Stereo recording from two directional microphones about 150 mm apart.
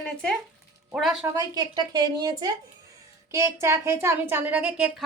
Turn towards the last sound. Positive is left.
turn(degrees=-10)  # may be behind; listen again after turning